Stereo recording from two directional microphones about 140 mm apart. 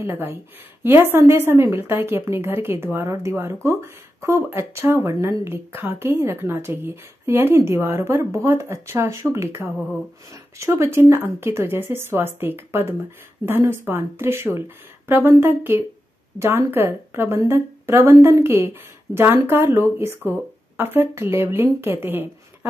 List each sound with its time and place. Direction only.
0.0 s a woman's voice: 15° right (ahead or behind)